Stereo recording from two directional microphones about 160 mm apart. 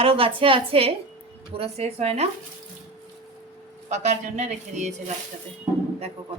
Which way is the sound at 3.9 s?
45° right (ahead or behind).